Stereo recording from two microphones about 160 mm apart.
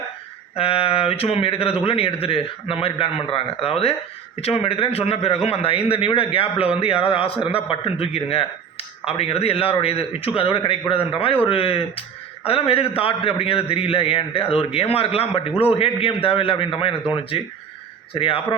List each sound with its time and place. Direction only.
0.5 s a man's voice: 35° left (ahead or behind)